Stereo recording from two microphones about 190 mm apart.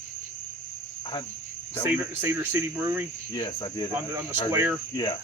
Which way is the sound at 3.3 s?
25° left (ahead or behind).